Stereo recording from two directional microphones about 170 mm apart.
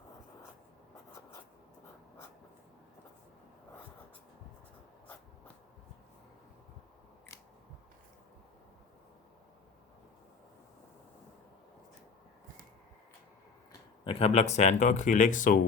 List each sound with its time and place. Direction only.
14.0 s speech: 35° left (ahead or behind)